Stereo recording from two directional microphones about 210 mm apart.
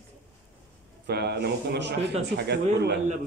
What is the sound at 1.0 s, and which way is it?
Speech, 50° right (ahead or behind).